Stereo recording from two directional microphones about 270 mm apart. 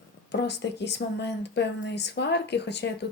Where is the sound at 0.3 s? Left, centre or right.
Left.